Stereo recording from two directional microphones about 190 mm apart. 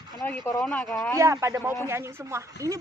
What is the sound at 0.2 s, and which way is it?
Speech, 10° left (ahead or behind).